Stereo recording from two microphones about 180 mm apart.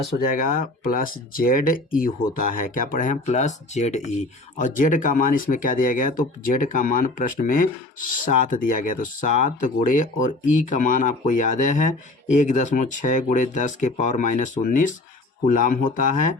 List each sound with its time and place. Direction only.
0.2 s speech: 50° left (ahead or behind)